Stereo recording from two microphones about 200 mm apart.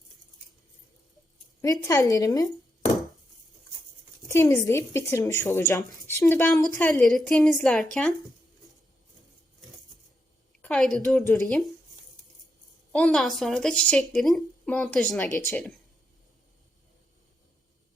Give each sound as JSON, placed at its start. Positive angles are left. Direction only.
{"t": 1.6, "sound": "speech", "side_deg": 15}
{"t": 4.3, "sound": "speech", "side_deg": 15}
{"t": 10.6, "sound": "a woman's voice", "side_deg": 5}
{"t": 12.9, "sound": "a woman's voice", "side_deg": 5}